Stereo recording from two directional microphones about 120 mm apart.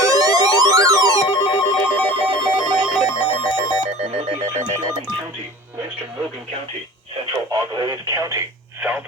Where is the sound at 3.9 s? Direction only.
60° right (ahead or behind).